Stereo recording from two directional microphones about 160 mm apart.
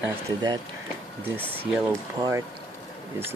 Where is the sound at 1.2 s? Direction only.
10° right (ahead or behind).